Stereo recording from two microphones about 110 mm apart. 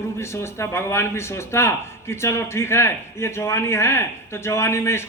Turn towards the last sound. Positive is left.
turn(degrees=25)  # may be behind; listen again after turning